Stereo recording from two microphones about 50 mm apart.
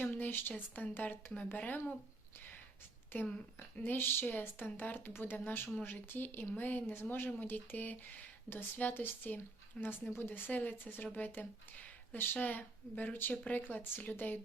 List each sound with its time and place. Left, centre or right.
0.0 s speech: left
3.1 s speech: left
4.9 s speech: left
5.2 s speech: left
10.1 s speech: left